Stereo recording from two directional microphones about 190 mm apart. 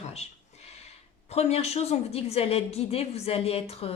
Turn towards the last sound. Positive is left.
turn(degrees=30)  # may be behind; listen again after turning